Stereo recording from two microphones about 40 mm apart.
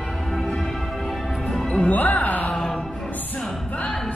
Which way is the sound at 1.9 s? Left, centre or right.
Left.